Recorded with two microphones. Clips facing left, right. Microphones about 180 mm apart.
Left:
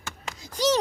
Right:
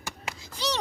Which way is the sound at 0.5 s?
45° left (ahead or behind).